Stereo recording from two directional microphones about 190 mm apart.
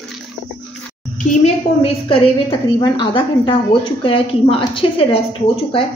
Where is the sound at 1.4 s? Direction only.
30° left (ahead or behind).